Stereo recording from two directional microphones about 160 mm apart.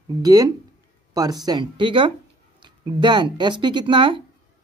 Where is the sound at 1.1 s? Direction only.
20° right (ahead or behind).